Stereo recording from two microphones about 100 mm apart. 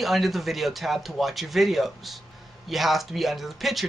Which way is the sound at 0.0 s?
Centre (ahead or behind).